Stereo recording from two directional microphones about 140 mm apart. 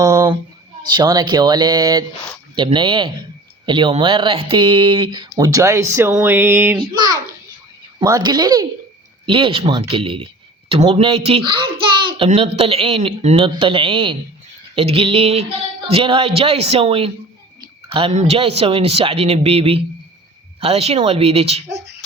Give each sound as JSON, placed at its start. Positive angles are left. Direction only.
{"t": 0.0, "sound": "speech", "side_deg": -25}
{"t": 6.7, "sound": "speech", "side_deg": -35}
{"t": 18.1, "sound": "speech", "side_deg": -50}